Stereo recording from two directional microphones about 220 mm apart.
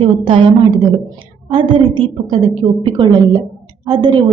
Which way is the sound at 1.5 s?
20° right (ahead or behind).